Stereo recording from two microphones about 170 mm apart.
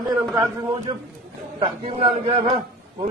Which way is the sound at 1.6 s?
35° right (ahead or behind).